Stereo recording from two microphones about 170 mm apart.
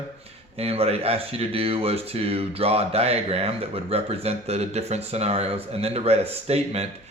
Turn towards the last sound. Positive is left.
turn(degrees=-35)  # may be behind; listen again after turning